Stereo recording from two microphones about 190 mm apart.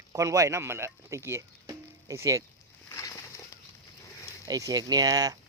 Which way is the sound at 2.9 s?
15° left (ahead or behind).